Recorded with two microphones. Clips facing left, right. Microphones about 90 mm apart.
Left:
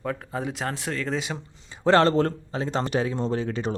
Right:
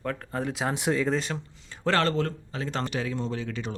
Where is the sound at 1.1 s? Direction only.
10° left (ahead or behind).